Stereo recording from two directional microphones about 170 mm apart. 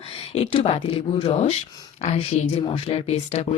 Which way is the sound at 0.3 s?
35° left (ahead or behind).